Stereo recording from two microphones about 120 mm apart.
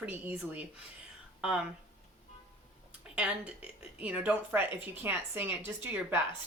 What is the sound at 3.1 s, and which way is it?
A woman's voice, 10° right (ahead or behind).